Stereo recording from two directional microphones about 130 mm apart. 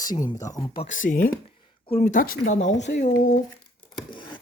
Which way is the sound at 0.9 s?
90° left.